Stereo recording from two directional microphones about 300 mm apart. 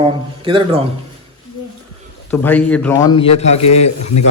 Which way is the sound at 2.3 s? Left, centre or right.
Centre.